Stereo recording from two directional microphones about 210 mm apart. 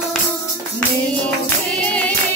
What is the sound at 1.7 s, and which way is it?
Music, 5° left (ahead or behind).